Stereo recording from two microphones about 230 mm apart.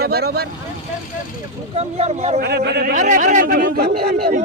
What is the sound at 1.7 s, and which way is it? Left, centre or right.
Speech, right.